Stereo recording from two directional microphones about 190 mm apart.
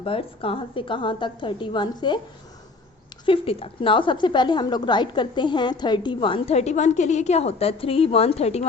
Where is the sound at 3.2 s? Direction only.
30° left (ahead or behind).